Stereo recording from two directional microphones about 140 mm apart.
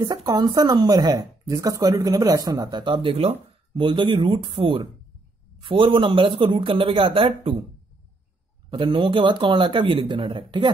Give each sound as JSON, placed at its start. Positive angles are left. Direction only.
{"t": 0.0, "sound": "speech", "side_deg": -30}
{"t": 8.6, "sound": "speech", "side_deg": -35}